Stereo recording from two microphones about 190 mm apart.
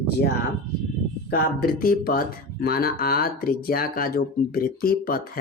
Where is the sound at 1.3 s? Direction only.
55° left (ahead or behind).